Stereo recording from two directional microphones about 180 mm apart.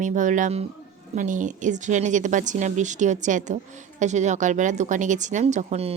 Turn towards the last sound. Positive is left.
turn(degrees=-35)  # may be behind; listen again after turning